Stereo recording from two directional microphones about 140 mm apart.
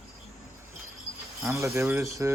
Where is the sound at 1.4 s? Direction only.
20° right (ahead or behind).